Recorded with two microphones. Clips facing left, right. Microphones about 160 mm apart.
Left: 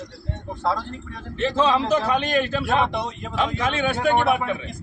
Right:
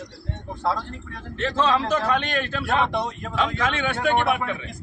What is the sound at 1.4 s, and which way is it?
A man's voice, 10° left (ahead or behind).